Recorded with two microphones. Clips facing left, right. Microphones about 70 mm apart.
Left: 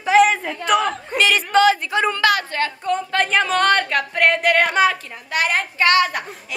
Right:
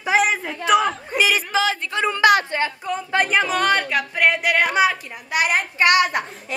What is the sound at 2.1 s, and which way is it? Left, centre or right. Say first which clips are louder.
A woman's voice: right 3 dB; centre.